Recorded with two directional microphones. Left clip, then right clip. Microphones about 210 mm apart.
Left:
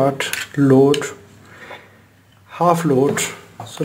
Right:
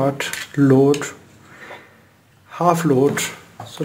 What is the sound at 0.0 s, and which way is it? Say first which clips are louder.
Speech: left 3 dB; centre (ahead or behind).